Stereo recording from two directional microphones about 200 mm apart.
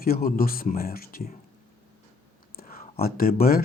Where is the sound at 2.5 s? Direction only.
45° left (ahead or behind).